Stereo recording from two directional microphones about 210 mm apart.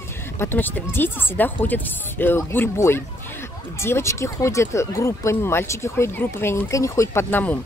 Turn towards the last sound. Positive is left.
turn(degrees=10)  # may be behind; listen again after turning